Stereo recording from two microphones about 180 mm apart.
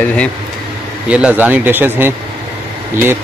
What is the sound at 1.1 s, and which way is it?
Speech, 5° right (ahead or behind).